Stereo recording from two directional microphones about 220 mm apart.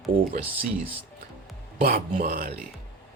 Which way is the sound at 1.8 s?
45° right (ahead or behind).